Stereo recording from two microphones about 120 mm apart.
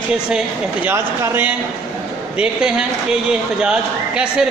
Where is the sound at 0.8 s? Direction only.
20° right (ahead or behind).